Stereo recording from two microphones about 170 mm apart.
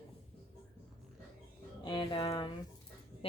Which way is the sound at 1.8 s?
25° left (ahead or behind).